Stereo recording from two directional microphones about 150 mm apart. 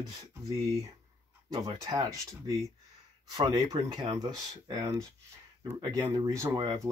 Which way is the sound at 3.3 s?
30° right (ahead or behind).